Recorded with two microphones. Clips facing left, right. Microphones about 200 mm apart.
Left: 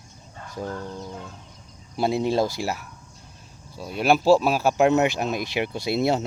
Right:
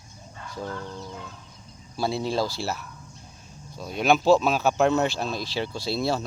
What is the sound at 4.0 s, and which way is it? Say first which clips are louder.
Speech: left 1 dB; 10° left (ahead or behind).